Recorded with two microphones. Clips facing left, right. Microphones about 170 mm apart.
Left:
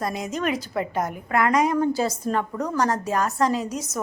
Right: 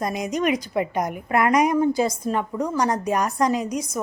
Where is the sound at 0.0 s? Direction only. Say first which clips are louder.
Right 3 dB; 15° right (ahead or behind).